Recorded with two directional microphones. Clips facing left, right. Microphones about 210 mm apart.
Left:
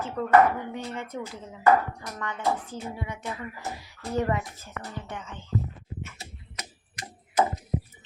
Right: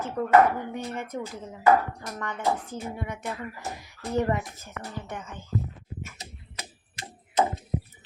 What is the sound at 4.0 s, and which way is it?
Speech, 15° right (ahead or behind).